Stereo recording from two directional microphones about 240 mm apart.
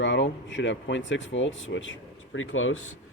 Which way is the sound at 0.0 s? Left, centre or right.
Left.